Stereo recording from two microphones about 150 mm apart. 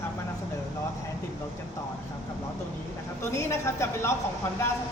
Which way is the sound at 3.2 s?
20° left (ahead or behind).